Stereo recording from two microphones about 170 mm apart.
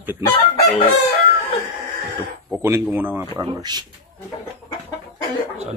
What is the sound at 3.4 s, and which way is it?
Speech, 25° right (ahead or behind).